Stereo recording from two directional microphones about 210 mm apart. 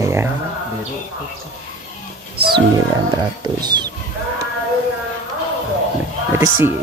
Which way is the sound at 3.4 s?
20° right (ahead or behind).